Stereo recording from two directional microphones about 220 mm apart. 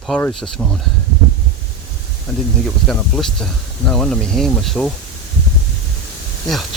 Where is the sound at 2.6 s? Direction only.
Centre (ahead or behind).